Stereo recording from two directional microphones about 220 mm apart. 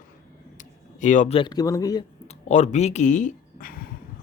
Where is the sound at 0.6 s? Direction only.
35° left (ahead or behind).